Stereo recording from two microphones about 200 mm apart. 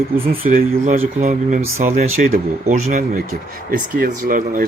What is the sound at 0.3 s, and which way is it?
Speech, 45° right (ahead or behind).